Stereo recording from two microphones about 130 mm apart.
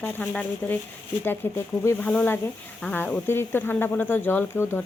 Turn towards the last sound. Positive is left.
turn(degrees=15)  # may be behind; listen again after turning